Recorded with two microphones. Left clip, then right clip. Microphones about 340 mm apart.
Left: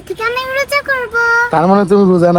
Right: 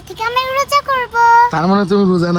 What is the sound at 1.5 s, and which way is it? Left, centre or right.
Speech, centre.